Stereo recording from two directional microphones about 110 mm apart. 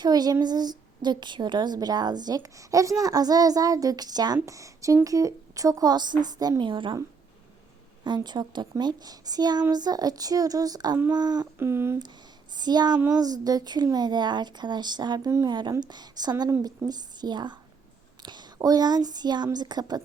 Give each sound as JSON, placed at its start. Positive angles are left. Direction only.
{"t": 0.0, "sound": "a woman's voice", "side_deg": -35}
{"t": 8.0, "sound": "speech", "side_deg": -40}
{"t": 11.5, "sound": "speech", "side_deg": -20}
{"t": 12.5, "sound": "a woman's voice", "side_deg": -40}